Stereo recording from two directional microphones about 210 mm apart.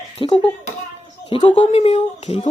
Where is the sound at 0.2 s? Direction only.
20° left (ahead or behind).